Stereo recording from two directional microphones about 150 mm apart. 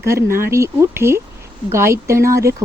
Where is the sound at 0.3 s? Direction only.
15° right (ahead or behind).